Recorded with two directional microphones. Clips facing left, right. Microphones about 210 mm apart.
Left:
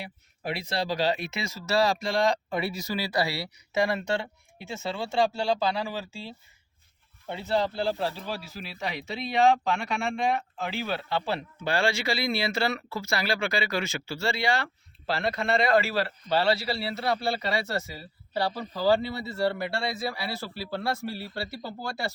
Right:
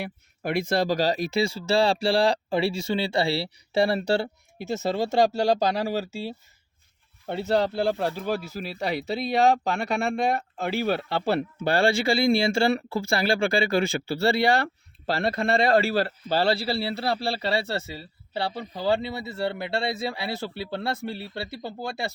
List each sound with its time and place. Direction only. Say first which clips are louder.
0.0 s speech: right 5 dB; 50° right (ahead or behind)
11.7 s speech: right 5 dB; 35° right (ahead or behind)
14.3 s speech: right 6 dB; 60° right (ahead or behind)
15.1 s speech: right 3 dB; 35° right (ahead or behind); by 22.1 s 20° right (ahead or behind)